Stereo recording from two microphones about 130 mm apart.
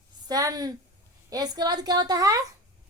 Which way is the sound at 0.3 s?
30° right (ahead or behind).